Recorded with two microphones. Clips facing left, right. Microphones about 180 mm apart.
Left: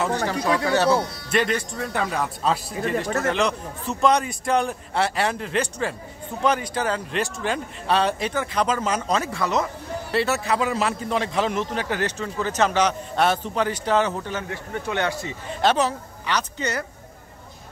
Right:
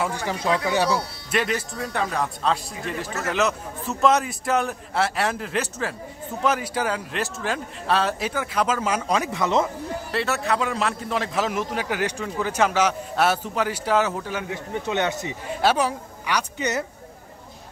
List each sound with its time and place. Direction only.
0.7 s a man's voice: 10° right (ahead or behind)
10.1 s a man's voice: centre (ahead or behind); by 16.8 s 15° right (ahead or behind)